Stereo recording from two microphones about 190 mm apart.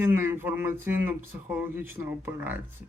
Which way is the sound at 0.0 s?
10° right (ahead or behind).